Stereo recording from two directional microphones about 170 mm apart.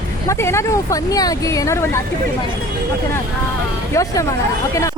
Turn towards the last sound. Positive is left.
turn(degrees=20)  # may be behind; listen again after turning